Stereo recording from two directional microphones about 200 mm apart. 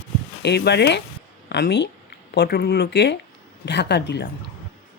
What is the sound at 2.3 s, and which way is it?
Speech, 50° left (ahead or behind).